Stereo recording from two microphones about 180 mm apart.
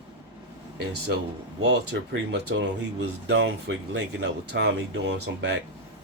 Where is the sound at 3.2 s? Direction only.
90° right.